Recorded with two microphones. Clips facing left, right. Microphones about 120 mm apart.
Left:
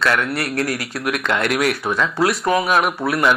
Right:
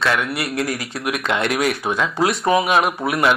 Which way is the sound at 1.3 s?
20° right (ahead or behind).